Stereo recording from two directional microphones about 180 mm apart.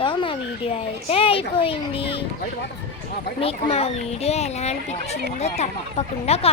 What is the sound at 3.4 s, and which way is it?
Speech, 35° left (ahead or behind).